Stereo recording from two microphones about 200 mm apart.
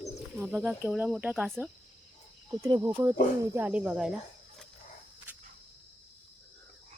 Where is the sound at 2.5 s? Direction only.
25° right (ahead or behind).